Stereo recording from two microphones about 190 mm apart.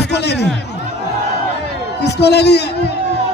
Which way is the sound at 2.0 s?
60° left (ahead or behind).